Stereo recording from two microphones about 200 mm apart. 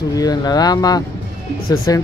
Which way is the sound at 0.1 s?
20° left (ahead or behind).